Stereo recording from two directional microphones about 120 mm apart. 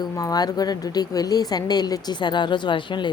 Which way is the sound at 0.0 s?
35° left (ahead or behind).